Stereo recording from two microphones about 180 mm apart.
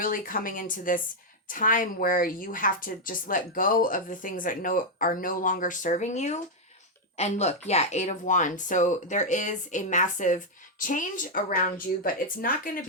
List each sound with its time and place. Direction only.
0.0 s speech: 50° left (ahead or behind)